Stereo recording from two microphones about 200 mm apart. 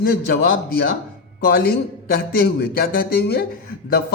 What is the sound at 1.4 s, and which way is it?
A man's voice, 50° left (ahead or behind).